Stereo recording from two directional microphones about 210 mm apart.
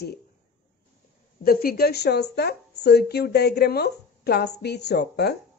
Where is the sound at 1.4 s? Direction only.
45° left (ahead or behind).